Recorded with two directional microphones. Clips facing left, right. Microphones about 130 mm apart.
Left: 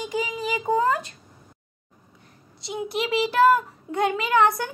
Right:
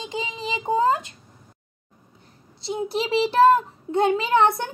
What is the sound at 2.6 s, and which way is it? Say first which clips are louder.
A child's voice: right 2 dB; 30° right (ahead or behind).